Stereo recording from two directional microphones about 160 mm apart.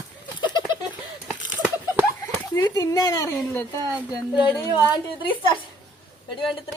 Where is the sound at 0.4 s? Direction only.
25° left (ahead or behind).